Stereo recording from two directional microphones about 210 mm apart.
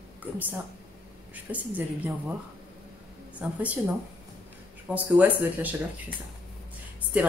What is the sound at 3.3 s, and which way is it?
Speech, 5° right (ahead or behind).